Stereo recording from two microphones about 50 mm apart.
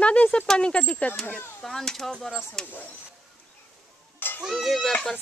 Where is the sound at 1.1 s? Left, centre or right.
Left.